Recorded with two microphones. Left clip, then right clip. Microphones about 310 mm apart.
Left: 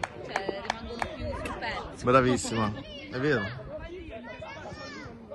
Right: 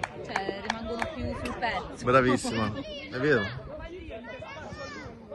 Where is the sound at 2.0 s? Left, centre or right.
Centre.